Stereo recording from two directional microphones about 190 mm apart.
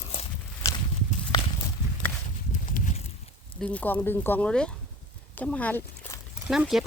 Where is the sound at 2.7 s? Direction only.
45° left (ahead or behind).